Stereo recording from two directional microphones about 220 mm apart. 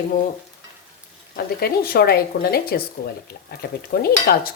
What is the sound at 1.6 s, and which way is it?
Speech, 45° left (ahead or behind).